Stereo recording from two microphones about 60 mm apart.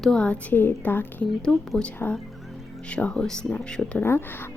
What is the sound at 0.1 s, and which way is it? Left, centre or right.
Speech, centre.